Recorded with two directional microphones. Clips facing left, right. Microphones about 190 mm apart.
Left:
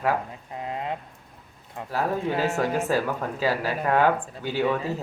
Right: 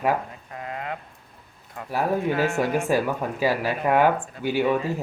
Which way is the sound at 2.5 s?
10° right (ahead or behind).